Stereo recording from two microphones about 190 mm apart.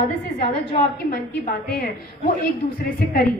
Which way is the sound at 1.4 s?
50° left (ahead or behind).